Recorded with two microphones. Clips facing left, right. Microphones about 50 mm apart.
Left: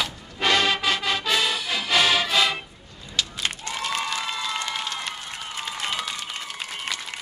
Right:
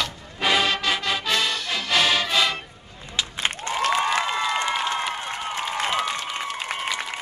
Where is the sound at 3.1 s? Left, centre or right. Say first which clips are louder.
Right 1 dB; right.